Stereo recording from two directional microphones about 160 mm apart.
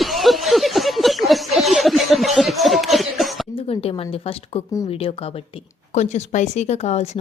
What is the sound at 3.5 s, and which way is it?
A woman's voice, 40° left (ahead or behind).